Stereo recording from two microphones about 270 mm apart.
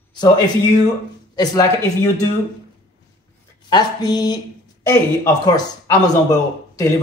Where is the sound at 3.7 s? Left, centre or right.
Centre.